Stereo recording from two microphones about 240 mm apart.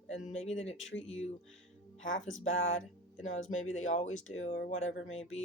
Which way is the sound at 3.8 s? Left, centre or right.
Left.